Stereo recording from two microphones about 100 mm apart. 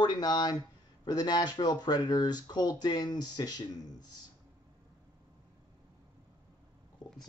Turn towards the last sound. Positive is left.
turn(degrees=40)  # may be behind; listen again after turning